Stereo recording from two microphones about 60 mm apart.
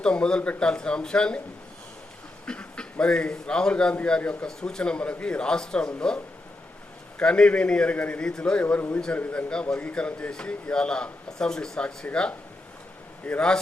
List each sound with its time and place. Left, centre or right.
0.0 s a man's voice: centre
2.5 s a man's voice: centre
7.2 s a man's voice: centre
9.1 s a man's voice: left
9.5 s a man's voice: centre
13.2 s a man's voice: centre